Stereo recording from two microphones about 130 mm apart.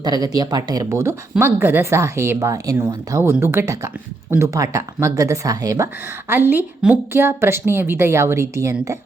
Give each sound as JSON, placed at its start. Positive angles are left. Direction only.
{"t": 0.0, "sound": "speech", "side_deg": -30}